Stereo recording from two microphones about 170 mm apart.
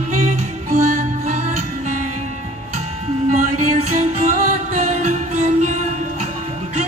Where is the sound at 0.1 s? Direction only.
45° right (ahead or behind).